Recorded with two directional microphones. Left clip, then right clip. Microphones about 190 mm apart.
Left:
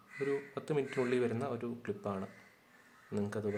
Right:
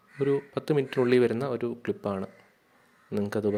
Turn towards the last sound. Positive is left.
turn(degrees=-40)  # may be behind; listen again after turning